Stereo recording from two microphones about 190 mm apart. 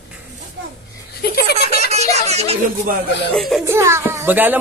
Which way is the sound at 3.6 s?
15° right (ahead or behind).